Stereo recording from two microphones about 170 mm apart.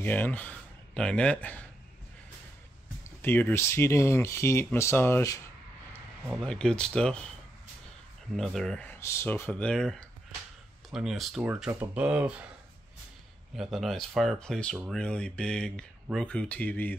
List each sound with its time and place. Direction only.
0.0 s speech: 10° left (ahead or behind)
3.0 s speech: 15° left (ahead or behind)
6.4 s speech: 5° left (ahead or behind)
8.4 s speech: 5° left (ahead or behind)
13.6 s speech: centre (ahead or behind)